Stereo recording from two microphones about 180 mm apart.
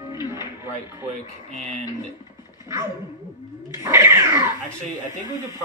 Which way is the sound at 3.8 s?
15° right (ahead or behind).